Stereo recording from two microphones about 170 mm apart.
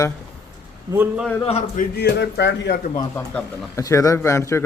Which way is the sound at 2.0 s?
85° left.